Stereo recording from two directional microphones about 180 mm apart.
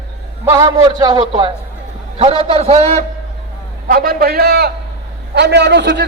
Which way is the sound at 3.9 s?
55° right (ahead or behind).